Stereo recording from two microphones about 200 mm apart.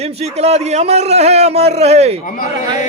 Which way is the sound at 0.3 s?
30° right (ahead or behind).